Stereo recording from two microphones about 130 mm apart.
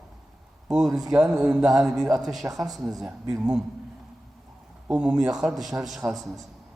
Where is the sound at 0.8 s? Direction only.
25° right (ahead or behind).